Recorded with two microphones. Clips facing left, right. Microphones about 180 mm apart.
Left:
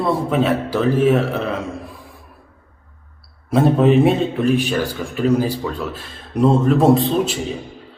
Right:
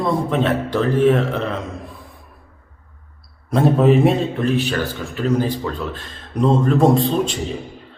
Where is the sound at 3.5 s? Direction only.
Centre (ahead or behind).